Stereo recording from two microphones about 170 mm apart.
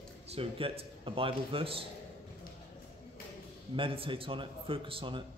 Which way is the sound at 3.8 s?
30° right (ahead or behind).